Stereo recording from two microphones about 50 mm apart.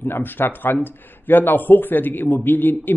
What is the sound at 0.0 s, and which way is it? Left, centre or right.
A man's voice, left.